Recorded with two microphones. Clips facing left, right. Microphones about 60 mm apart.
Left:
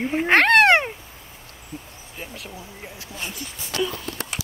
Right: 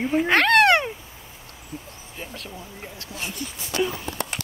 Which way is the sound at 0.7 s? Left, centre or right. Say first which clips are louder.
Left 2 dB; left.